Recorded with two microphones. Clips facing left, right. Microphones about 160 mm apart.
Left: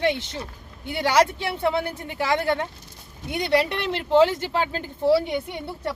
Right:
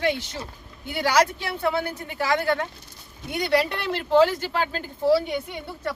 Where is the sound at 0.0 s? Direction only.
25° left (ahead or behind).